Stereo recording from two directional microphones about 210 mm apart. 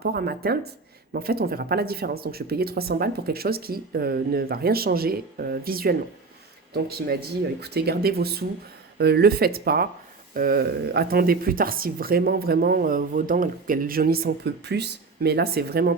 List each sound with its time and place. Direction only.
0.0 s speech: 50° right (ahead or behind)